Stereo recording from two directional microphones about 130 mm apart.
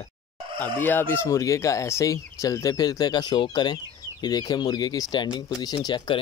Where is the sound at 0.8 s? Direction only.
15° left (ahead or behind).